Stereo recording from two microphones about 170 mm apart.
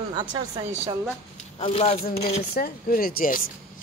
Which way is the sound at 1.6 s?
35° left (ahead or behind).